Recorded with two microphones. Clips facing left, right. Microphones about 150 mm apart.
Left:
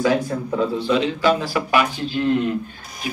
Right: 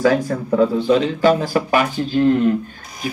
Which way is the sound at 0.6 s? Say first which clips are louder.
Right 5 dB; 45° right (ahead or behind).